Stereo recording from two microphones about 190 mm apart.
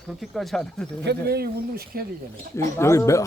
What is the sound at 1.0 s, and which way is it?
Speech, 55° right (ahead or behind).